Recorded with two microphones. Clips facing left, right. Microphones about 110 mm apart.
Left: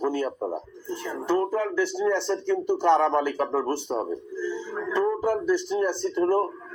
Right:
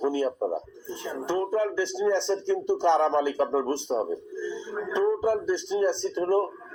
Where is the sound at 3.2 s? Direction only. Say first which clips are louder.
Even; 20° right (ahead or behind).